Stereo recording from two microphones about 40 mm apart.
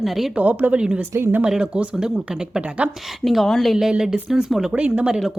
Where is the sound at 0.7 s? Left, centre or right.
Right.